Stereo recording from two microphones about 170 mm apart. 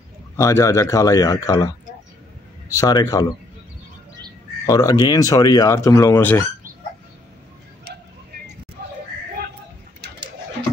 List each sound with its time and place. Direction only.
0.4 s speech: 15° left (ahead or behind)
2.7 s speech: 20° left (ahead or behind)
4.6 s speech: 20° left (ahead or behind)